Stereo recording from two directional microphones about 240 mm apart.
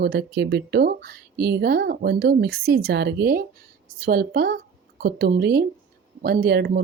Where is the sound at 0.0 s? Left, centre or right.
Right.